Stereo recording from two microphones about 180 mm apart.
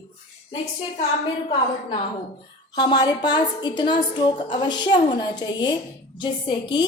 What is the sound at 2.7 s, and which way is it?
A woman's voice, 25° left (ahead or behind).